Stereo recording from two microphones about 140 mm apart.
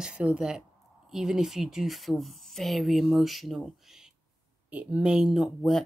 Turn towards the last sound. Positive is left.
turn(degrees=0)  # may be behind; listen again after turning